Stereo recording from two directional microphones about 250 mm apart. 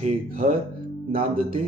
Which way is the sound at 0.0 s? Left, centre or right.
Right.